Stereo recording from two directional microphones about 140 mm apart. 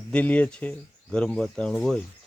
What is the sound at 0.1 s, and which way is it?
Speech, 10° left (ahead or behind).